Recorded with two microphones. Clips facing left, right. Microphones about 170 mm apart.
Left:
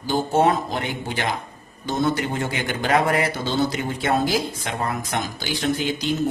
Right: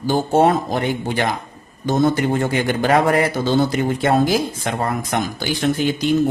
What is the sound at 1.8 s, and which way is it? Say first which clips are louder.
Speech: right 6 dB; 45° right (ahead or behind).